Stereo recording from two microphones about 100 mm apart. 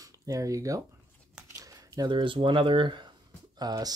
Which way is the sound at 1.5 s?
35° right (ahead or behind).